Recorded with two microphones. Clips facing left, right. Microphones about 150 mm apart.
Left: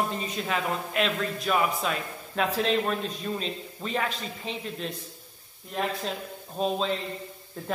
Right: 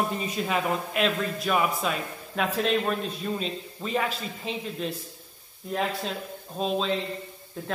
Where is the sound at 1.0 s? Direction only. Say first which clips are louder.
Right 1 dB; centre (ahead or behind).